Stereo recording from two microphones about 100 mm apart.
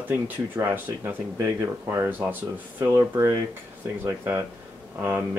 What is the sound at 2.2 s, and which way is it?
Speech, 20° right (ahead or behind).